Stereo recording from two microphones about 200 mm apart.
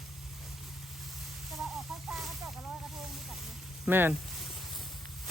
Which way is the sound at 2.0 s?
Centre (ahead or behind).